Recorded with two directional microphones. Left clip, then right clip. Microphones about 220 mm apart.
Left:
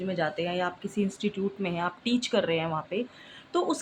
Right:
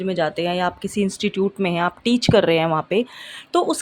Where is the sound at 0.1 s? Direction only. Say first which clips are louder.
Right 8 dB; 50° right (ahead or behind).